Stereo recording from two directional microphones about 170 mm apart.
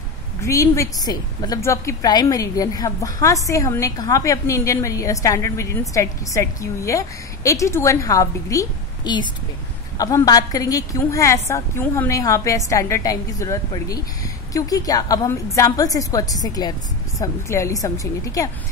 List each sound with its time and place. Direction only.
0.4 s a woman's voice: 15° left (ahead or behind)